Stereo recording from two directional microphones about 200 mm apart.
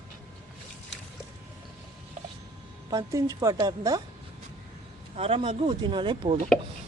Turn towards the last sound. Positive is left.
turn(degrees=-25)  # may be behind; listen again after turning